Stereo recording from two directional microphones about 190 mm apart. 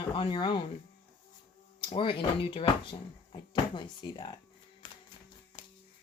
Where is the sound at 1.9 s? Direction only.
25° left (ahead or behind).